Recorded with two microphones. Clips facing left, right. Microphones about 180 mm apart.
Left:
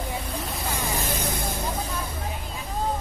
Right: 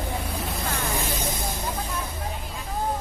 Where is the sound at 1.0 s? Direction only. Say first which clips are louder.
Left 1 dB; 55° left (ahead or behind).